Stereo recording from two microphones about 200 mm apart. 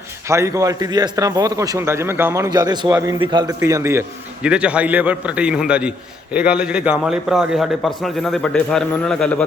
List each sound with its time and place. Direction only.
0.3 s a man's voice: 15° right (ahead or behind); by 9.4 s 5° left (ahead or behind)